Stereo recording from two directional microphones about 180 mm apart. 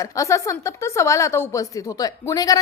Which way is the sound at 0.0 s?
15° left (ahead or behind).